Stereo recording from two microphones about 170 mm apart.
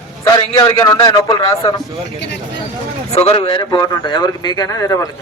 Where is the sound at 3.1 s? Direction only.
35° left (ahead or behind).